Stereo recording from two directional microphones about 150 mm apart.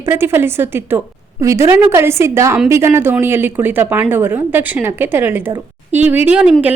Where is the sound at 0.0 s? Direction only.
15° right (ahead or behind).